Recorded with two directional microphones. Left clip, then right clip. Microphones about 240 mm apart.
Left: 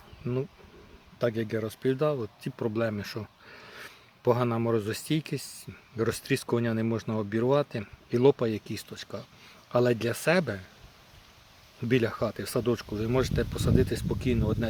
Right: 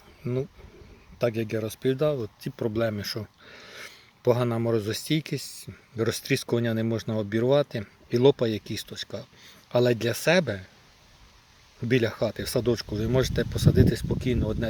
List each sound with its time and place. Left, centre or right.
1.2 s speech: centre
11.9 s speech: centre